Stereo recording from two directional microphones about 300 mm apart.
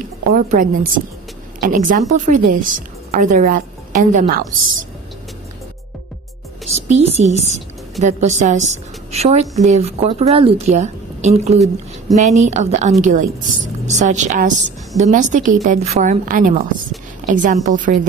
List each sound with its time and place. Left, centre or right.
0.3 s a woman's voice: right
6.7 s a woman's voice: right